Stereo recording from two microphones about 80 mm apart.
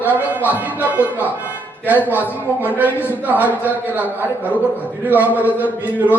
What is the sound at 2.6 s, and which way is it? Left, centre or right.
Speech, right.